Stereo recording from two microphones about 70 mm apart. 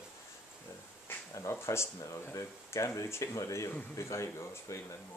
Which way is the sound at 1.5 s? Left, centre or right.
Left.